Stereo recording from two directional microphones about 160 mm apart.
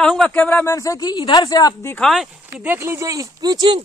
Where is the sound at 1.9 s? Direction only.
Centre (ahead or behind).